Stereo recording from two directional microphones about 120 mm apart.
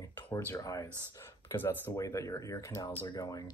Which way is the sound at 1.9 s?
30° left (ahead or behind).